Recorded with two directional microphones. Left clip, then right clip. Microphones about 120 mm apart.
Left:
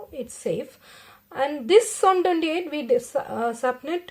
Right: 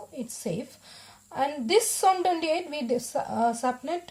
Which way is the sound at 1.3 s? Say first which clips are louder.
Left 6 dB; 35° right (ahead or behind).